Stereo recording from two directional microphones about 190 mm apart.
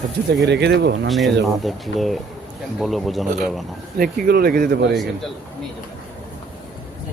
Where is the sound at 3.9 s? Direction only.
50° right (ahead or behind).